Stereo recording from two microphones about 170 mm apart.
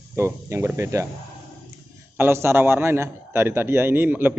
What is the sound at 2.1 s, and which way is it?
Speech, 15° right (ahead or behind).